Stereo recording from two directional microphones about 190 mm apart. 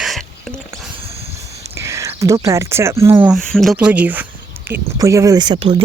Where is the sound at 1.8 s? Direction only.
15° right (ahead or behind).